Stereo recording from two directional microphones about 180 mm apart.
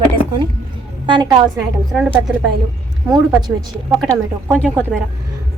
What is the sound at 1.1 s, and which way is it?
Speech, 25° right (ahead or behind).